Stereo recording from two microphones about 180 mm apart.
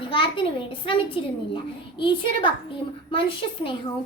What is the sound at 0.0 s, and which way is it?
A child's voice, 30° left (ahead or behind).